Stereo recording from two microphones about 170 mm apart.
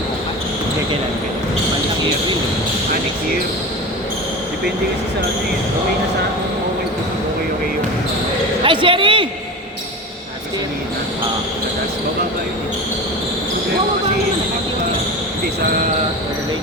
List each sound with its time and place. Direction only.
8.6 s speech: 30° right (ahead or behind)